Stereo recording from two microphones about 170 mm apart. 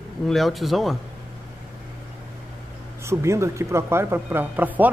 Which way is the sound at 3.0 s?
15° right (ahead or behind).